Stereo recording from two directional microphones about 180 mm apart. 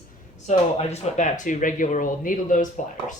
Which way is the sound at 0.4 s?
40° left (ahead or behind).